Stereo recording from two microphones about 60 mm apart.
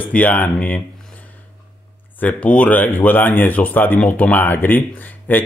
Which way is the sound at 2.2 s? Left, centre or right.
Left.